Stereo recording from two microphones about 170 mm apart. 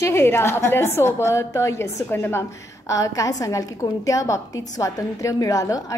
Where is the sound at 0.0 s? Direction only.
15° left (ahead or behind).